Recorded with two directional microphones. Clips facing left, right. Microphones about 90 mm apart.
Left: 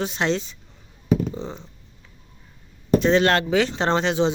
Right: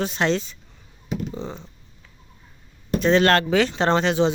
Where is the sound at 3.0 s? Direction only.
20° left (ahead or behind).